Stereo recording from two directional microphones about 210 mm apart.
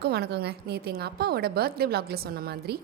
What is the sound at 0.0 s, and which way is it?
A woman's voice, 50° right (ahead or behind).